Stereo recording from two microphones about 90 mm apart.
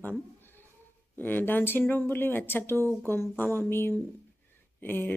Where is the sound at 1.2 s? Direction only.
20° left (ahead or behind).